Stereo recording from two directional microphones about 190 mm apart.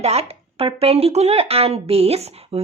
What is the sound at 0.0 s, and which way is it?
Speech, 35° right (ahead or behind).